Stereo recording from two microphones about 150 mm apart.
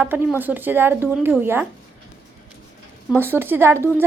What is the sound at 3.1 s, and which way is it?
Speech, 15° right (ahead or behind).